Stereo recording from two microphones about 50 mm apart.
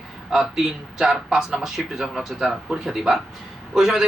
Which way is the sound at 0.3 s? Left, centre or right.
Centre.